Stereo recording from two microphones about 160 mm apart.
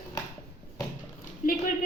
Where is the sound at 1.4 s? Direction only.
60° left (ahead or behind).